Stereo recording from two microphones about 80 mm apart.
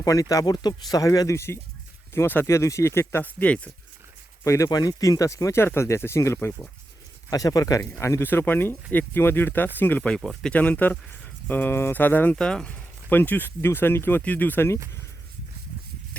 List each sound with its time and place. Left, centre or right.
0.0 s speech: left
2.1 s speech: left
4.4 s speech: left
7.3 s speech: left
7.8 s speech: left; by 10.2 s centre
10.2 s speech: centre
10.5 s speech: centre
12.4 s speech: centre
13.1 s speech: left